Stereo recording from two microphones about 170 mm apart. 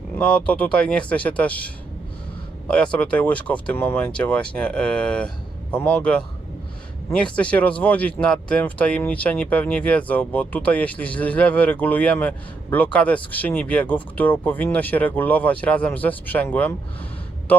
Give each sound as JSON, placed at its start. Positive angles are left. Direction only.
{"t": 0.2, "sound": "speech", "side_deg": 5}